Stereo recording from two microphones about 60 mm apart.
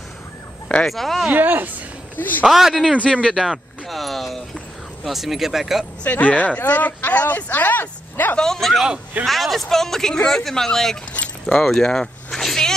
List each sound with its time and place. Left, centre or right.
0.8 s speech: centre
1.3 s speech: right
2.1 s a man's voice: left
2.4 s speech: centre
3.0 s speech: centre
3.3 s a sound: centre
5.0 s speech: centre
6.0 s speech: left
8.4 s speech: centre
11.1 s keys jangling: centre